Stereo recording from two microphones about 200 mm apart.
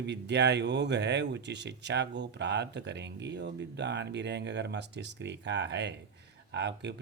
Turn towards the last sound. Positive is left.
turn(degrees=-60)  # may be behind; listen again after turning